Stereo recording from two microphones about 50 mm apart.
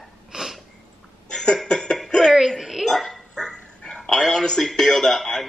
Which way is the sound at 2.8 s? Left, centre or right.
Centre.